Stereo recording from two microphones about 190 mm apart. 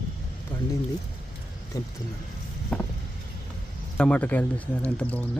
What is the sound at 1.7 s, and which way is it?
Speech, 15° left (ahead or behind).